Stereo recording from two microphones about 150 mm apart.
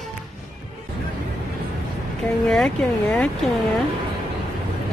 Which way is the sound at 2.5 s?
5° left (ahead or behind).